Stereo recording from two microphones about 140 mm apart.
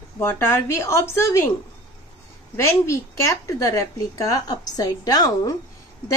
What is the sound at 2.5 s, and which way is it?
A woman's voice, 20° left (ahead or behind).